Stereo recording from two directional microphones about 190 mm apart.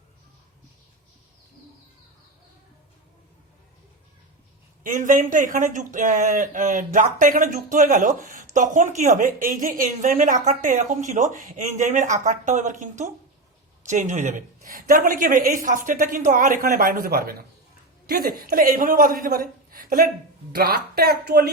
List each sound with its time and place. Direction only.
4.8 s a woman's voice: 45° right (ahead or behind)